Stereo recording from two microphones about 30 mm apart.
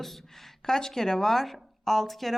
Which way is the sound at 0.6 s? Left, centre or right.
Centre.